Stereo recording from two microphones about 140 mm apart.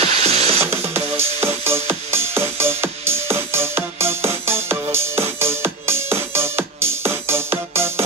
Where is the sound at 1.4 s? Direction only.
15° right (ahead or behind).